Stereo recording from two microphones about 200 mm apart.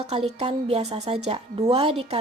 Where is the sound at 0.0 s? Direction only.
30° right (ahead or behind).